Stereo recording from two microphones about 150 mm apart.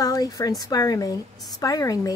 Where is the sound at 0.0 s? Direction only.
25° left (ahead or behind).